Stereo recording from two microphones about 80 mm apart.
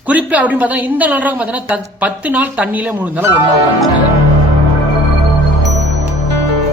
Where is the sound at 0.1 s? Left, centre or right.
Centre.